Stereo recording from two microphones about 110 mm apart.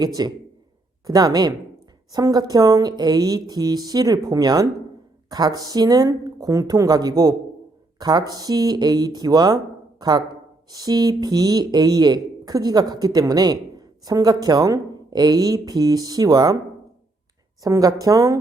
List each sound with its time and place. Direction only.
0.0 s speech: 40° right (ahead or behind)
17.6 s speech: 35° right (ahead or behind)